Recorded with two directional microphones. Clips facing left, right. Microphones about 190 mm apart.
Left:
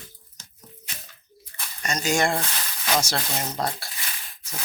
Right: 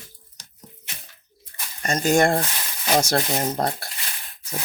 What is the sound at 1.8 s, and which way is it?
Speech, 50° right (ahead or behind).